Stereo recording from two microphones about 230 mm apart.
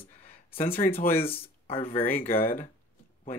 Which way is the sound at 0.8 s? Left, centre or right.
Left.